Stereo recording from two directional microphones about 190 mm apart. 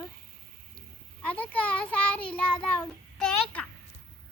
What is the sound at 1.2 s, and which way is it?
A child's voice, 10° left (ahead or behind).